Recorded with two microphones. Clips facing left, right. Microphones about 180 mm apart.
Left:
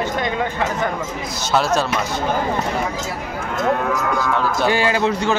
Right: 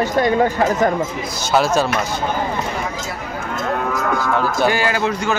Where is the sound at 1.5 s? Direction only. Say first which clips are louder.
Right 2 dB; 5° right (ahead or behind).